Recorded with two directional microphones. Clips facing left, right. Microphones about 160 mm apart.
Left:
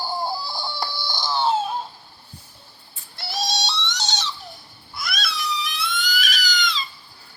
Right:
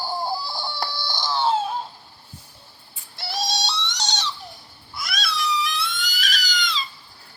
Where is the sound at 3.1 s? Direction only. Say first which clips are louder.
Right 1 dB; centre (ahead or behind).